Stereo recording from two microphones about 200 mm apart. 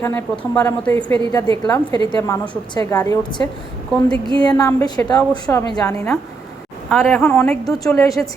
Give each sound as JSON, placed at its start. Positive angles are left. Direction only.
{"t": 0.0, "sound": "a woman's voice", "side_deg": 10}
{"t": 3.9, "sound": "a woman's voice", "side_deg": 0}
{"t": 4.4, "sound": "a woman's voice", "side_deg": 15}
{"t": 6.9, "sound": "a woman's voice", "side_deg": 0}
{"t": 7.2, "sound": "a woman's voice", "side_deg": 10}